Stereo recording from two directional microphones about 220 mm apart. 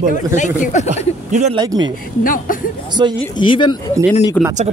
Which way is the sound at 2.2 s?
40° left (ahead or behind).